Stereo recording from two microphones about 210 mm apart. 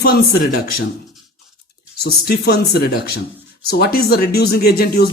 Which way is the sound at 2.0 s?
50° left (ahead or behind).